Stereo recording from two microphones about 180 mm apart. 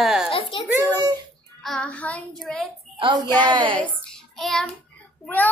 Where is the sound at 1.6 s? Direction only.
5° left (ahead or behind).